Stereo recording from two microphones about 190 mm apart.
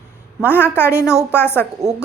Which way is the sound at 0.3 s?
10° right (ahead or behind).